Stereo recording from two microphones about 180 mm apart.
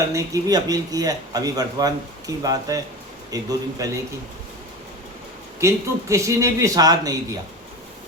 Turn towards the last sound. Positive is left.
turn(degrees=-20)  # may be behind; listen again after turning